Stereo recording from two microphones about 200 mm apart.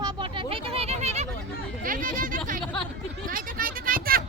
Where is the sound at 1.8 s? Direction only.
45° right (ahead or behind).